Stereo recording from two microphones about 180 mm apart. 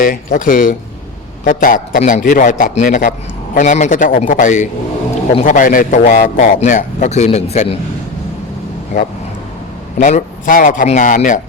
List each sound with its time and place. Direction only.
0.0 s a man's voice: 50° left (ahead or behind)
10.0 s a man's voice: 45° left (ahead or behind)